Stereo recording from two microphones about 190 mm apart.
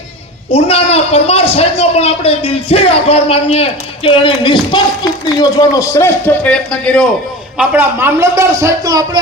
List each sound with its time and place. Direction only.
0.5 s a man's voice: 30° left (ahead or behind); by 7.1 s 5° left (ahead or behind)
7.6 s a man's voice: 10° right (ahead or behind)